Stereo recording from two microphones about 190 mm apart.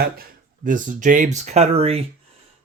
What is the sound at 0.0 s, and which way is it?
Speech, 50° right (ahead or behind).